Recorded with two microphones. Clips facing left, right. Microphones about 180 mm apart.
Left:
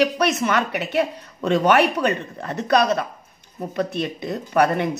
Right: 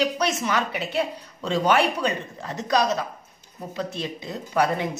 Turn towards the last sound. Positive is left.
turn(degrees=60)  # may be behind; listen again after turning